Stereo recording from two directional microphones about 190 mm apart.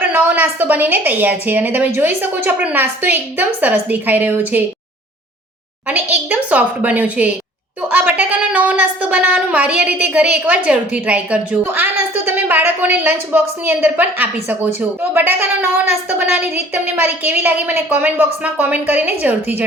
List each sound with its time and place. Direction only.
0.1 s a woman's voice: 10° right (ahead or behind)
5.9 s a woman's voice: 10° right (ahead or behind)
16.2 s a woman's voice: 35° left (ahead or behind)
16.7 s a woman's voice: 10° right (ahead or behind)